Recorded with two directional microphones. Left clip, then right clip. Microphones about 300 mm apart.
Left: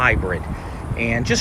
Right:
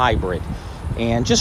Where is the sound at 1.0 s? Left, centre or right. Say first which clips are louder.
Even; right.